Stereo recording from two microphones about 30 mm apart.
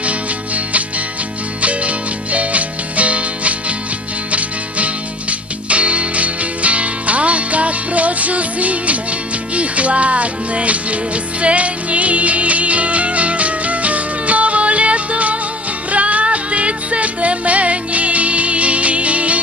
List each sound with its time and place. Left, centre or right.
0.0 s music: right